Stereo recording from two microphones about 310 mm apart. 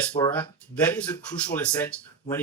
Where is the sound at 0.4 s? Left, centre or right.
Centre.